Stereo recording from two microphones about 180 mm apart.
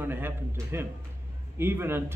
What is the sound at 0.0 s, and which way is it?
A man's voice, 10° right (ahead or behind).